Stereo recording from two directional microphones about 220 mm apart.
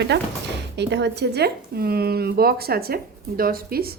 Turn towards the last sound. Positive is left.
turn(degrees=-45)  # may be behind; listen again after turning